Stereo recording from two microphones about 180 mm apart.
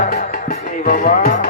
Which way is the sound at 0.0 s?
50° left (ahead or behind).